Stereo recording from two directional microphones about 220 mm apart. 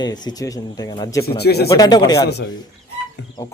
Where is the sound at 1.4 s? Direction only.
45° left (ahead or behind).